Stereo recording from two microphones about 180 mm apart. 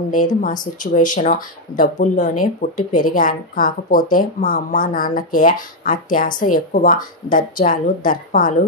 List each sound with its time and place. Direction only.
0.4 s speech: 45° left (ahead or behind)